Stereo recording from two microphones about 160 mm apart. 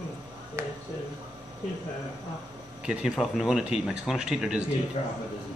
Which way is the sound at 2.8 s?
5° right (ahead or behind).